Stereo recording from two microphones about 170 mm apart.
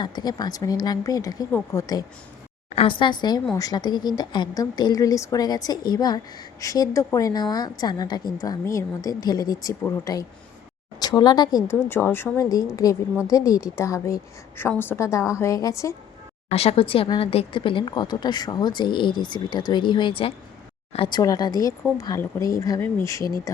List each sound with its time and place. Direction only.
0.0 s a woman's voice: 25° left (ahead or behind)
2.6 s a woman's voice: 35° left (ahead or behind); by 16.0 s 20° left (ahead or behind)
16.5 s a woman's voice: 35° left (ahead or behind); by 23.2 s 15° left (ahead or behind)